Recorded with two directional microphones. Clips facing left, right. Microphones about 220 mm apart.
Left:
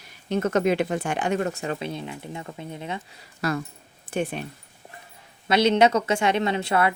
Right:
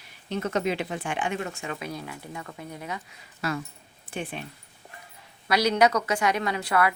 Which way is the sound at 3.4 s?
40° left (ahead or behind).